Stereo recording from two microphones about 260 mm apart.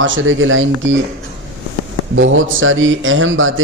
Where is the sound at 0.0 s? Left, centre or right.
Right.